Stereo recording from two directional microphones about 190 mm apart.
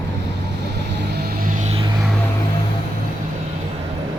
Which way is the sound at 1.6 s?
35° right (ahead or behind).